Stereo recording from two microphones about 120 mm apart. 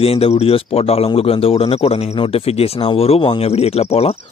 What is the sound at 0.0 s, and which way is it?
A man's voice, 55° left (ahead or behind).